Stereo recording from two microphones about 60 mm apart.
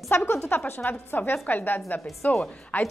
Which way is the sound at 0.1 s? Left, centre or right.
Left.